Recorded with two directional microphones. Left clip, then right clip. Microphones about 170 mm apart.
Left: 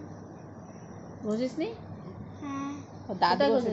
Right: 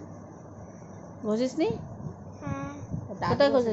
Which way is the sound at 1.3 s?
20° right (ahead or behind).